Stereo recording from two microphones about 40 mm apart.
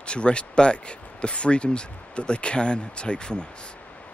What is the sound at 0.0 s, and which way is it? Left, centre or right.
Speech, left.